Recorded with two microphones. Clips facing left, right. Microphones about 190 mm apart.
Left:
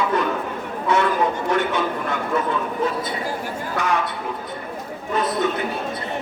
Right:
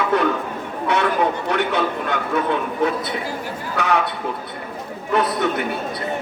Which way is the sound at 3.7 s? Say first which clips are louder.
Right 2 dB; 65° right (ahead or behind).